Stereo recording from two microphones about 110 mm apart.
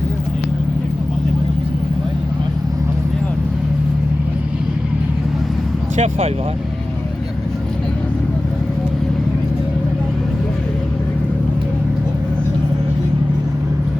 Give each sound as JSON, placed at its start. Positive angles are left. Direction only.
{"t": 6.0, "sound": "speech", "side_deg": -65}